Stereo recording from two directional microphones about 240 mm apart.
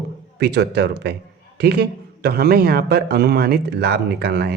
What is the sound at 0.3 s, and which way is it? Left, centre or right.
A man's voice, right.